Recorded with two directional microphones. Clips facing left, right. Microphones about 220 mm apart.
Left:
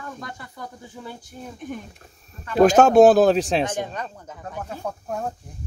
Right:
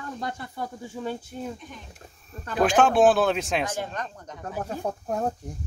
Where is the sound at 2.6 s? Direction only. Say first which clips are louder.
Left 6 dB; 40° left (ahead or behind).